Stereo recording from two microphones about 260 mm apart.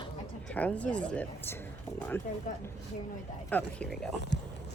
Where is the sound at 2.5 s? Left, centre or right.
Left.